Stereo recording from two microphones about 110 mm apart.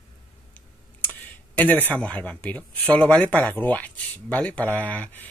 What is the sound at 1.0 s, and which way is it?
Computer keyboard, 15° left (ahead or behind).